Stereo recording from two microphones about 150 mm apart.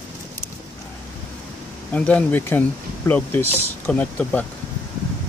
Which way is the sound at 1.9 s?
10° left (ahead or behind).